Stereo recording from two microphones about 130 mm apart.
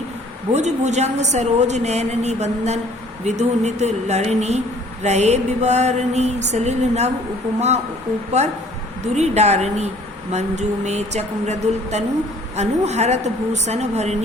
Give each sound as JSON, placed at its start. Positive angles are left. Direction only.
{"t": 0.5, "sound": "a woman's voice", "side_deg": -60}
{"t": 8.4, "sound": "a woman's voice", "side_deg": -60}